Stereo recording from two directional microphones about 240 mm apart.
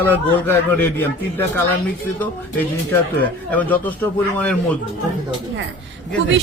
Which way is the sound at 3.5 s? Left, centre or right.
Centre.